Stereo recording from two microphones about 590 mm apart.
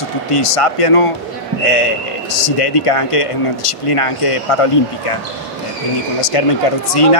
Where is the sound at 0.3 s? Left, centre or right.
Left.